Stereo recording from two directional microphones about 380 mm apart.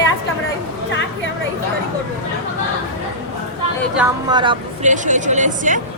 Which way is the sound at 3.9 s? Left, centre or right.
Centre.